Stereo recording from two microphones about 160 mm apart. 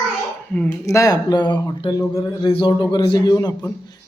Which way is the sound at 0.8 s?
20° left (ahead or behind).